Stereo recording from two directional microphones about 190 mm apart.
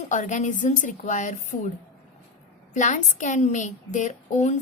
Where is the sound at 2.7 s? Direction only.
40° left (ahead or behind).